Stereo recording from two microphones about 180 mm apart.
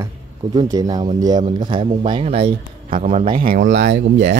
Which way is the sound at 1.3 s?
25° right (ahead or behind).